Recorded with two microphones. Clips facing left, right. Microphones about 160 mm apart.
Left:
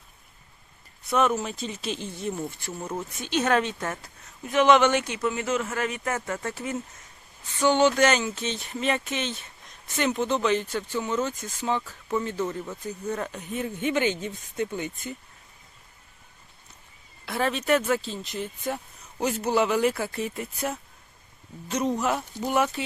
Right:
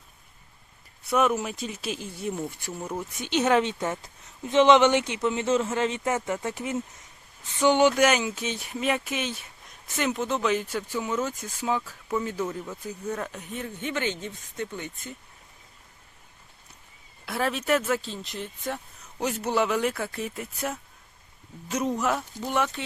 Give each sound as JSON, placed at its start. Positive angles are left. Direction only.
{"t": 1.1, "sound": "speech", "side_deg": -10}
{"t": 17.2, "sound": "speech", "side_deg": -5}